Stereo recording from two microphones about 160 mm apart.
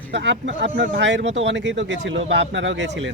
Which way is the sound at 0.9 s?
90° right.